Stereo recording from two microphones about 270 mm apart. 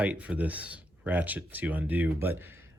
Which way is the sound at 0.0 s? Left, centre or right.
Centre.